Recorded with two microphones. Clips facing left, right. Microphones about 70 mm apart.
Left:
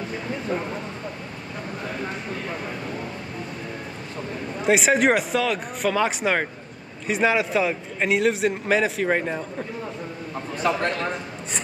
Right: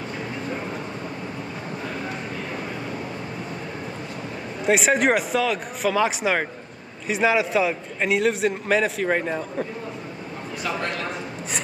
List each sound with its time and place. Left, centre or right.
4.6 s a man's voice: centre